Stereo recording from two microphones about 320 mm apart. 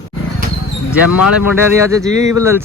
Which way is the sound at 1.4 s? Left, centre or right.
Centre.